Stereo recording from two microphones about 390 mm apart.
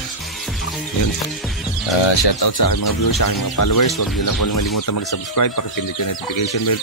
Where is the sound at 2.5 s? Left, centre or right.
Left.